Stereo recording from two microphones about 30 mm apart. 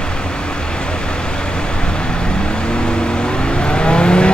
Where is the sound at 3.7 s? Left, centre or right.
Left.